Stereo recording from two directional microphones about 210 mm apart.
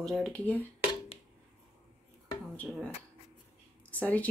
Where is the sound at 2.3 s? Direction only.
5° left (ahead or behind).